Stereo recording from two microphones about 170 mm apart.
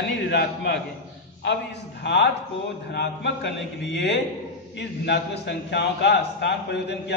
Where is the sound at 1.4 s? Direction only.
90° left.